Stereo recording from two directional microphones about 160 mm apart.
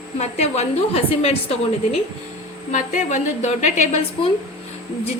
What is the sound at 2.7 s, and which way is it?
A woman's voice, 50° left (ahead or behind).